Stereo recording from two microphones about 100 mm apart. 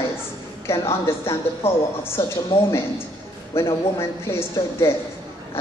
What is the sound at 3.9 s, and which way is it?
Speech, 30° left (ahead or behind).